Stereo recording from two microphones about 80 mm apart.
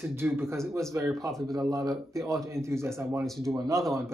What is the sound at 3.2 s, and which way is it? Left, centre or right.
Speech, centre.